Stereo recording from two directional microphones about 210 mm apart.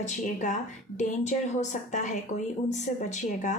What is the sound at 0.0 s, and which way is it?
Speech, 35° left (ahead or behind).